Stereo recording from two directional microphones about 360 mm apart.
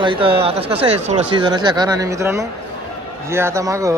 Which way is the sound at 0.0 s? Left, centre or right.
Centre.